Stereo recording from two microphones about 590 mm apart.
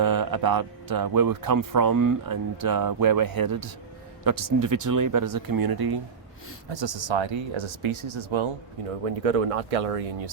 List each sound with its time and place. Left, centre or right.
0.0 s speech: right
9.2 s speech: right